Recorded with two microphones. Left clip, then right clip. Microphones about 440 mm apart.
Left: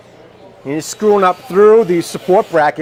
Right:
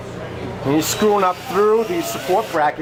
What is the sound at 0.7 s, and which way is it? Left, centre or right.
Speech, left.